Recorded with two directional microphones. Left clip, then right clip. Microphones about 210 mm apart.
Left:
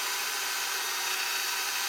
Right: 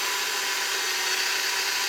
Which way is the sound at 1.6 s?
5° right (ahead or behind).